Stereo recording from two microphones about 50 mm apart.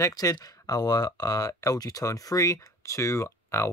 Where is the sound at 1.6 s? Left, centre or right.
Left.